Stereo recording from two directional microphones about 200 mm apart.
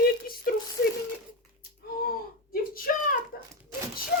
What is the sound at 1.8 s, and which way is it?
Speech, 45° left (ahead or behind).